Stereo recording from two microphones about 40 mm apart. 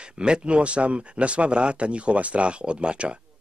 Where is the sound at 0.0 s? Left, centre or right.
Right.